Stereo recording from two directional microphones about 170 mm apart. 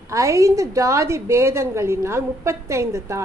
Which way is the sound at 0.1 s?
20° right (ahead or behind).